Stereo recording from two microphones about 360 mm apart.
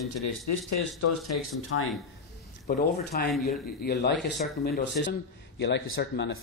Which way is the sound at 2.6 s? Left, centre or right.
Left.